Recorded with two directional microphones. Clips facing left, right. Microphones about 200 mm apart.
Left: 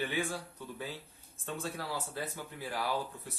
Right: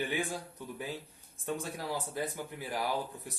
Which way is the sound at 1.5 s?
15° right (ahead or behind).